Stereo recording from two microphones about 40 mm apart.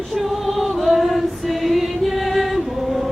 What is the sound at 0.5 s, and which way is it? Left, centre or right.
Music, centre.